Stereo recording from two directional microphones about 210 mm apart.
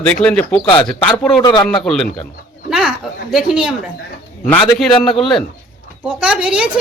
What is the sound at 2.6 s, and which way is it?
Chicken, 5° right (ahead or behind).